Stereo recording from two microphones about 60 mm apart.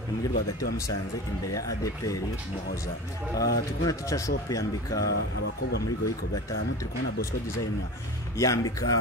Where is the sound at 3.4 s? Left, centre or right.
Left.